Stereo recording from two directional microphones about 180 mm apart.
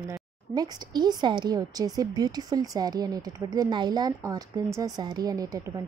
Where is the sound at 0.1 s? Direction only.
20° right (ahead or behind).